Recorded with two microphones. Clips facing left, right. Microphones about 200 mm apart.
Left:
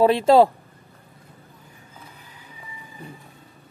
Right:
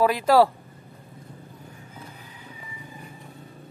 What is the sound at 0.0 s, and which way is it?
Speech, 25° left (ahead or behind).